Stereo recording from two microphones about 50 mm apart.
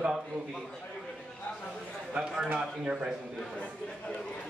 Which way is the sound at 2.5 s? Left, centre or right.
Right.